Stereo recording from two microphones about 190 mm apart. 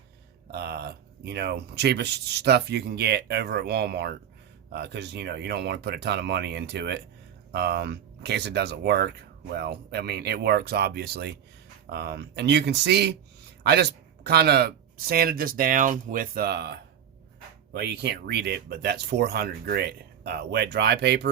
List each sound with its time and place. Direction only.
0.5 s speech: 60° right (ahead or behind)
14.3 s speech: 60° right (ahead or behind)
17.7 s speech: 60° right (ahead or behind)